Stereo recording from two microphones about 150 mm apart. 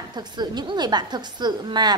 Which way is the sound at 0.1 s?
30° right (ahead or behind).